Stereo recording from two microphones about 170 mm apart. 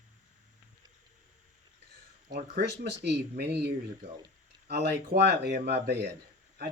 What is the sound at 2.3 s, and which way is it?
Speech, 85° right.